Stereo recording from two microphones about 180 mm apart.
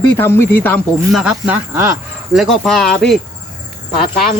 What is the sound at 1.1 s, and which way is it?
Speech, 5° right (ahead or behind).